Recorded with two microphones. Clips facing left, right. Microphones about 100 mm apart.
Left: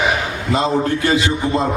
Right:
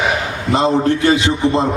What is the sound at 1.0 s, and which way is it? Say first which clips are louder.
Speech: right 3 dB; 20° right (ahead or behind).